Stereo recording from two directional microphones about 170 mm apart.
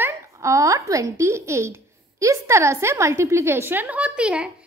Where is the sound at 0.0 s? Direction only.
20° right (ahead or behind).